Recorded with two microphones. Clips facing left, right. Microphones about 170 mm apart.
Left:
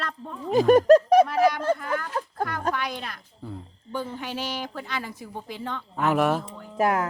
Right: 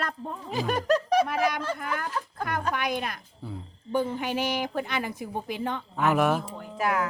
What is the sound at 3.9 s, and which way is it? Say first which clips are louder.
Speech: right 4 dB; 15° right (ahead or behind).